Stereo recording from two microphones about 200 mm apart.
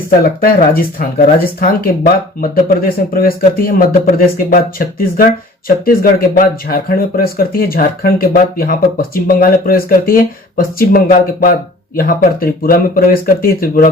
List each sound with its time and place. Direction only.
0.3 s speech: 45° left (ahead or behind)